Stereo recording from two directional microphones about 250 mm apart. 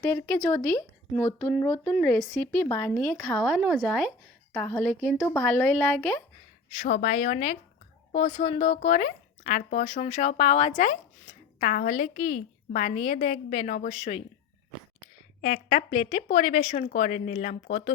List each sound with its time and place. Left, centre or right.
0.0 s speech: centre
6.7 s speech: left
15.4 s speech: left